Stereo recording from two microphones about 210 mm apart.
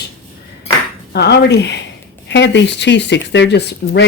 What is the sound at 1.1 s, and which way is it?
Speech, 50° left (ahead or behind).